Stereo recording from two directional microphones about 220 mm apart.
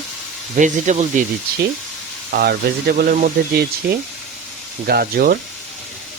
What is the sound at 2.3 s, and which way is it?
Speech, 45° right (ahead or behind).